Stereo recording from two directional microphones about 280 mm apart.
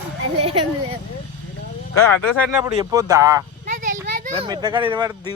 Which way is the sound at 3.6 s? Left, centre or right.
Right.